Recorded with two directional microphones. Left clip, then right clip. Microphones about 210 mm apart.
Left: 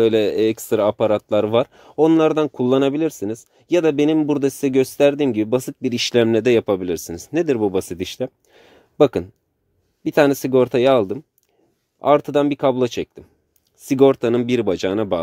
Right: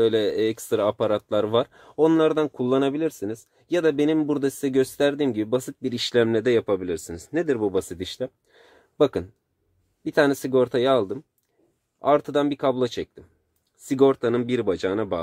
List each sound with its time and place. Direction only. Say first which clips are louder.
0.0 s speech: left 5 dB; 30° left (ahead or behind)